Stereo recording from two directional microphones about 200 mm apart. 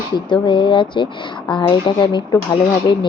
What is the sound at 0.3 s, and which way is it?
Speech, 25° left (ahead or behind).